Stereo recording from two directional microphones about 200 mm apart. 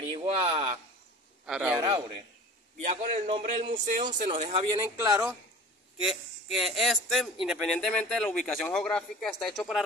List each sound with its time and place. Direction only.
0.1 s a sound: 25° right (ahead or behind)
1.4 s a man's voice: 5° right (ahead or behind)
1.8 s a man's voice: 20° right (ahead or behind)
2.8 s a man's voice: 35° right (ahead or behind)
3.7 s speech: 40° right (ahead or behind)
4.6 s speech: 15° right (ahead or behind)
5.9 s speech: centre (ahead or behind)